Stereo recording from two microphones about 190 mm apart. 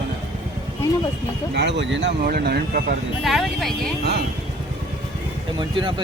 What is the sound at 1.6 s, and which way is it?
Speech, 65° right (ahead or behind).